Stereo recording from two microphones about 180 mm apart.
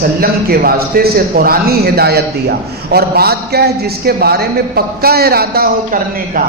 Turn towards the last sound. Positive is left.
turn(degrees=-55)  # may be behind; listen again after turning